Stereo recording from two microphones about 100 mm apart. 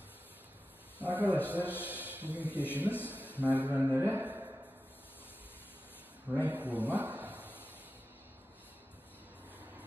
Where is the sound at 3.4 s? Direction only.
15° right (ahead or behind).